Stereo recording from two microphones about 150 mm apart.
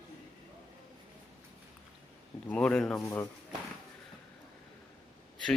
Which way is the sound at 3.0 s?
15° left (ahead or behind).